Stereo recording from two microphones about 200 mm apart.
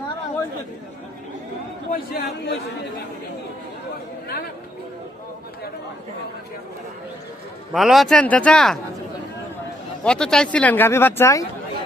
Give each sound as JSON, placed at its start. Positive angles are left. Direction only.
{"t": 1.9, "sound": "a man's voice", "side_deg": 50}
{"t": 7.7, "sound": "speech", "side_deg": 0}
{"t": 10.0, "sound": "speech", "side_deg": 5}